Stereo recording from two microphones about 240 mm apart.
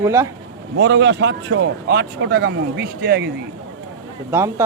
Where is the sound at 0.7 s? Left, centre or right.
Right.